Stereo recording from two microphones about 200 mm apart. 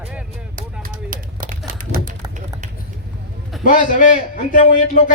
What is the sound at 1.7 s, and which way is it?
Run, 40° right (ahead or behind).